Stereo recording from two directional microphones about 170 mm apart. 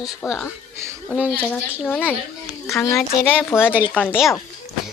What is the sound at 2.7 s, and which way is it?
Speech, 15° left (ahead or behind).